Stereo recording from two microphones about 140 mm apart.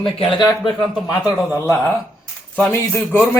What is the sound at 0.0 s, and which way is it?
Speech, 40° left (ahead or behind).